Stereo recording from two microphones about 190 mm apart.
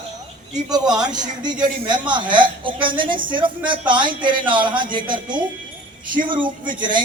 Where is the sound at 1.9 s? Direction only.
25° right (ahead or behind).